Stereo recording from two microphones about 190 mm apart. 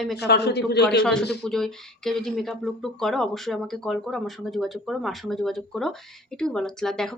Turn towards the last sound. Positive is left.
turn(degrees=5)  # may be behind; listen again after turning